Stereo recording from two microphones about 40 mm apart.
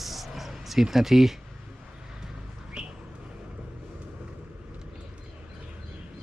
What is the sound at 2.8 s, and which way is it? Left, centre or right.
Bird, centre.